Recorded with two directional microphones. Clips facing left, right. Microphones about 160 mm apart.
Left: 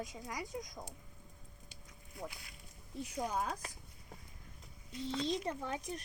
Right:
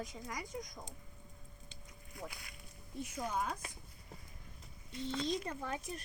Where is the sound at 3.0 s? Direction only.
35° left (ahead or behind).